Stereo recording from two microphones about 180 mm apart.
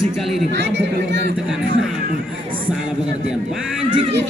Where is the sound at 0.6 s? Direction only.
75° right (ahead or behind).